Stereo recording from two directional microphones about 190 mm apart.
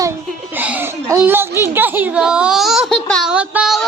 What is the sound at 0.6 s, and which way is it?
A child's voice, 10° right (ahead or behind).